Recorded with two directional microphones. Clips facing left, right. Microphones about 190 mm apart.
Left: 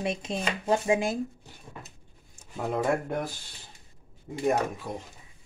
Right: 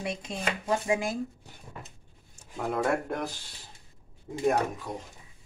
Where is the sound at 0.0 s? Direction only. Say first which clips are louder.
Left 3 dB; 20° left (ahead or behind).